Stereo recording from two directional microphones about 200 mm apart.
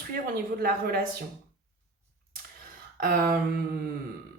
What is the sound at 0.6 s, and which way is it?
Speech, 50° right (ahead or behind).